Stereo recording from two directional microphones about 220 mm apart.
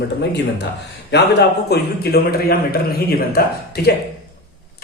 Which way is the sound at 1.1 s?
50° left (ahead or behind).